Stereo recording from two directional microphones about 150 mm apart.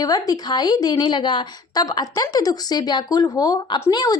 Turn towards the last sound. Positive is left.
turn(degrees=25)  # may be behind; listen again after turning